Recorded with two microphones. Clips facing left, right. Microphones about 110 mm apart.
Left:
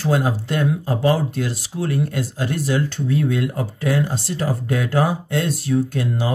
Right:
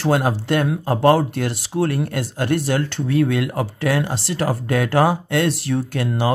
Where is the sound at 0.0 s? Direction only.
65° right (ahead or behind).